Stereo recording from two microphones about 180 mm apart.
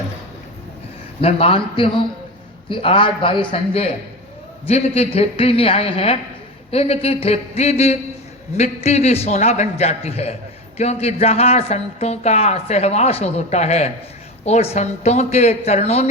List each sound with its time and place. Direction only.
1.2 s a man's voice: 30° left (ahead or behind)